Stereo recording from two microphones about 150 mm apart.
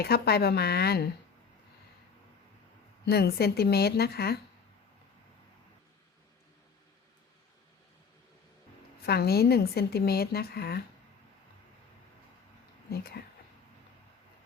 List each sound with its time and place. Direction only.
0.0 s speech: 90° left
3.1 s speech: 90° left
9.0 s speech: 90° left
12.9 s speech: 90° left